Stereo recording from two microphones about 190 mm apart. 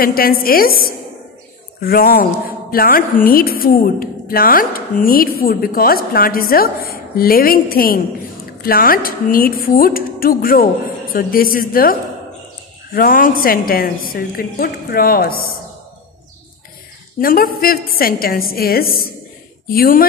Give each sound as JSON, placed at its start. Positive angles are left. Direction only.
{"t": 0.0, "sound": "a woman's voice", "side_deg": 50}
{"t": 17.2, "sound": "a woman's voice", "side_deg": 50}